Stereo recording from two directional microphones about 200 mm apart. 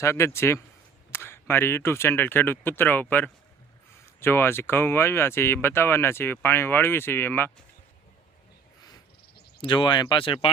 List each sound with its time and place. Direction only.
0.0 s speech: 15° left (ahead or behind)
9.6 s speech: 25° left (ahead or behind)